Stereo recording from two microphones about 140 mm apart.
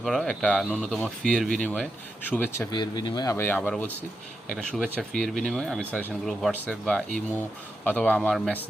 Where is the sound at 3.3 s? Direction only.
10° left (ahead or behind).